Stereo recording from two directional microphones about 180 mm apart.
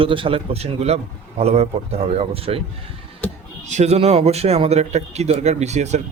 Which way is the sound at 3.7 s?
40° right (ahead or behind).